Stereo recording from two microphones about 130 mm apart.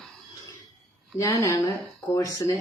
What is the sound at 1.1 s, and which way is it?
Speech, 25° left (ahead or behind).